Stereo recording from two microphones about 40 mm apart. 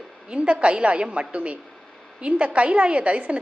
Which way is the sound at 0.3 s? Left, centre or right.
Right.